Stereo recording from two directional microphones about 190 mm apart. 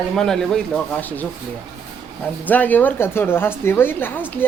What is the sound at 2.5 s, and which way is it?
A woman's voice, 10° left (ahead or behind).